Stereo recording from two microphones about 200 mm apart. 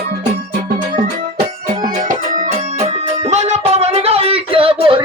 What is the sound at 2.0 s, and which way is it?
Music, 40° right (ahead or behind).